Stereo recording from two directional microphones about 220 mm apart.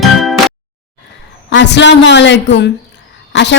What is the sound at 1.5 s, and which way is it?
A woman's voice, 55° left (ahead or behind).